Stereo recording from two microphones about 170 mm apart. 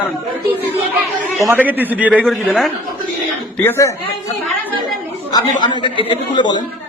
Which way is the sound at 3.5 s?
15° left (ahead or behind).